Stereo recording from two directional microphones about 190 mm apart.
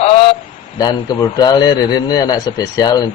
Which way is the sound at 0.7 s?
20° left (ahead or behind).